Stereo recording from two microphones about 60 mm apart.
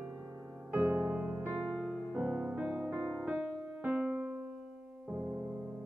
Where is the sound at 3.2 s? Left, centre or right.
Centre.